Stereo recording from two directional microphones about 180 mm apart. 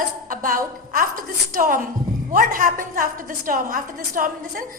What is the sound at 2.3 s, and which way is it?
A woman's voice, 50° right (ahead or behind).